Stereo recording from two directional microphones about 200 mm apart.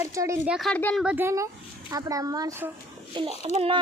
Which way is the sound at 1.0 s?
10° right (ahead or behind).